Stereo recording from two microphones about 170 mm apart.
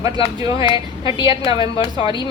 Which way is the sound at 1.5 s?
20° right (ahead or behind).